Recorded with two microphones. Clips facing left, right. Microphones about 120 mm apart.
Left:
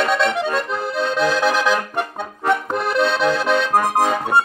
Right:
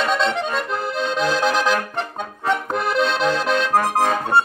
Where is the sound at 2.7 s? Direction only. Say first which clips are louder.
Left 1 dB; centre (ahead or behind).